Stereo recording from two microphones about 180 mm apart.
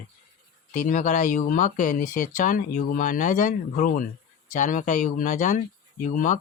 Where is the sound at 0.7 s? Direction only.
45° left (ahead or behind).